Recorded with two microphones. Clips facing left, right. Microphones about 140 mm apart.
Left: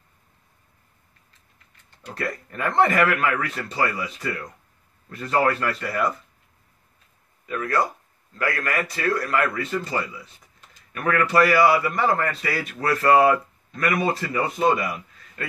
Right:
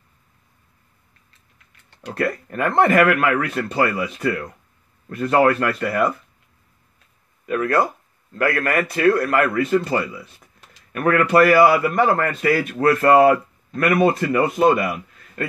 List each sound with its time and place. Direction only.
2.0 s a man's voice: 60° right (ahead or behind)
7.4 s a man's voice: 55° right (ahead or behind)
10.6 s a sound: 65° right (ahead or behind)
11.1 s a man's voice: 55° right (ahead or behind)